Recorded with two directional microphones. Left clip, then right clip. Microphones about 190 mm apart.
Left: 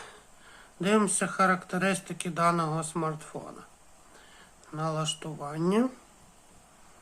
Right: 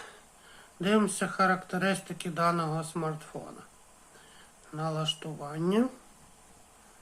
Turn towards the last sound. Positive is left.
turn(degrees=10)  # may be behind; listen again after turning